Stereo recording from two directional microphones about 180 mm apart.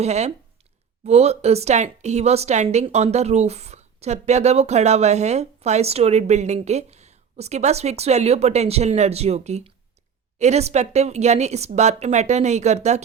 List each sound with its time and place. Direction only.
0.0 s a woman's voice: 40° right (ahead or behind)